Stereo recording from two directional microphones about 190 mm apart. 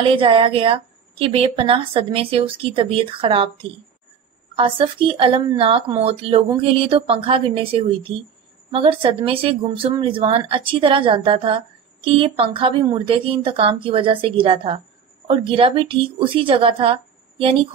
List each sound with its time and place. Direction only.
0.0 s speech: 30° right (ahead or behind)
4.6 s speech: 25° right (ahead or behind)